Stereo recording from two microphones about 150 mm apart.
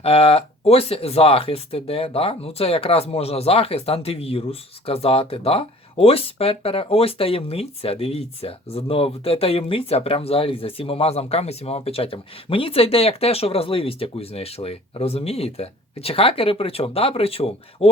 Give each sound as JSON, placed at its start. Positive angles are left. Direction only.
{"t": 0.0, "sound": "speech", "side_deg": 40}